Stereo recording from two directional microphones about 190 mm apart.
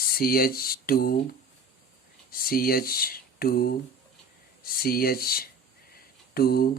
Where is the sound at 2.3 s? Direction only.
50° left (ahead or behind).